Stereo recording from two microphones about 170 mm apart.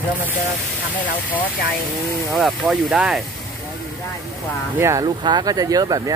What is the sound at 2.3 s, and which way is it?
Speech, centre (ahead or behind).